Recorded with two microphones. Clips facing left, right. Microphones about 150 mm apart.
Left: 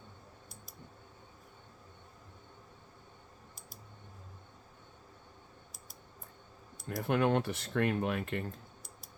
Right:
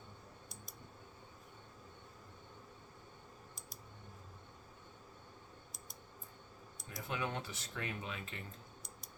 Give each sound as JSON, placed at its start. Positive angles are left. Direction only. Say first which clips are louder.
{"t": 6.8, "sound": "speech", "louder": "left 11 dB", "side_deg": 60}